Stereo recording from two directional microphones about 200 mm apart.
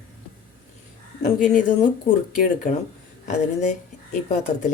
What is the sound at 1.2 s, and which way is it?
A woman's voice, 40° left (ahead or behind).